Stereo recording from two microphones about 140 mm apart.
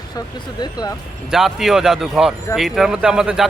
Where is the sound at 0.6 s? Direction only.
30° left (ahead or behind).